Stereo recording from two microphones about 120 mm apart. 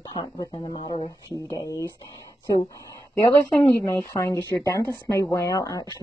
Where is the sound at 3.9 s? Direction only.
25° left (ahead or behind).